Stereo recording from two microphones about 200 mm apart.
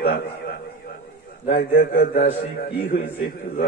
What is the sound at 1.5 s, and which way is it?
A man's voice, 50° left (ahead or behind).